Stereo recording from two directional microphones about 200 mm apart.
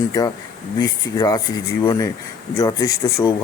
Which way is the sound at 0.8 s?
20° left (ahead or behind).